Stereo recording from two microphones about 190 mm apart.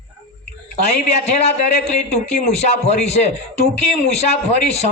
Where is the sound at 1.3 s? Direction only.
35° left (ahead or behind).